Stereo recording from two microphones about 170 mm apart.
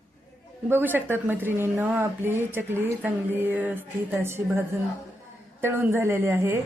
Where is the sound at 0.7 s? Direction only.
10° right (ahead or behind).